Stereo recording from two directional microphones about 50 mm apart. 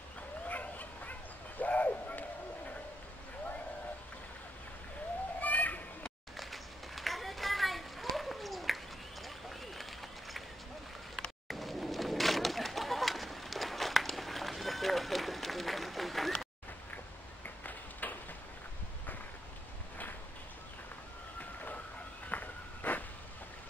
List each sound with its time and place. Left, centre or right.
0.5 s a sound: left
5.4 s children playing: left
6.3 s children playing: centre
11.1 s bird: centre
18.0 s tick-tock: left
22.3 s a sound: left